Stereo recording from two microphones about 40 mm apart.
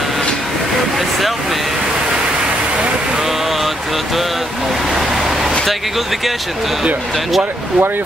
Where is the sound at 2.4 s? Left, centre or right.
Right.